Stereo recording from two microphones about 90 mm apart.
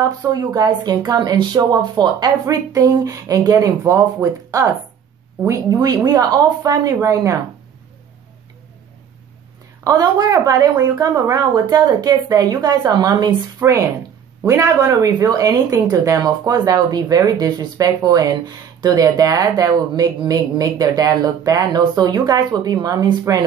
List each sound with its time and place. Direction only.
0.3 s speech: 45° right (ahead or behind)
2.4 s speech: 40° right (ahead or behind)
9.8 s speech: 45° right (ahead or behind)
13.6 s speech: 35° right (ahead or behind)